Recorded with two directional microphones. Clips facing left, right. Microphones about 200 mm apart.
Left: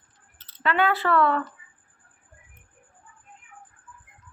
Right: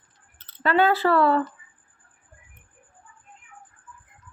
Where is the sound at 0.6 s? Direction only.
40° right (ahead or behind).